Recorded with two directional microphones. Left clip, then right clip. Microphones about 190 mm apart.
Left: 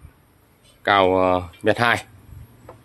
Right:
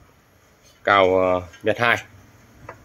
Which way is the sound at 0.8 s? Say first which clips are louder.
Even; 10° left (ahead or behind).